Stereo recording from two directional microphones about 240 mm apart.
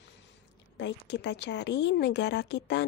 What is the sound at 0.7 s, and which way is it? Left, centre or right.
A woman's voice, left.